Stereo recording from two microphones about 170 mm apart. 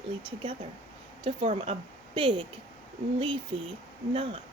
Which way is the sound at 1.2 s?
30° right (ahead or behind).